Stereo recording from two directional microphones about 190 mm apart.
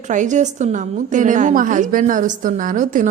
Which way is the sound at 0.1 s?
40° right (ahead or behind).